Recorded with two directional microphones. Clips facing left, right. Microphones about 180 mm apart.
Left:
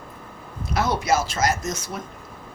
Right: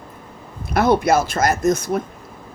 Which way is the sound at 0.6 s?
55° right (ahead or behind).